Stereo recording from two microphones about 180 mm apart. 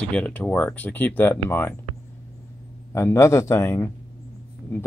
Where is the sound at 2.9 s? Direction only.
15° left (ahead or behind).